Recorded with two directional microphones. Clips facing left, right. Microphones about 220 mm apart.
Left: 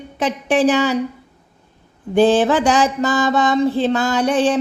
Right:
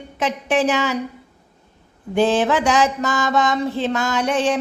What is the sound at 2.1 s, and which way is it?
Speech, 35° left (ahead or behind).